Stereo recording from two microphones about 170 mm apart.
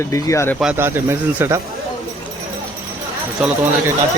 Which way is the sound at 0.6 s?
10° right (ahead or behind).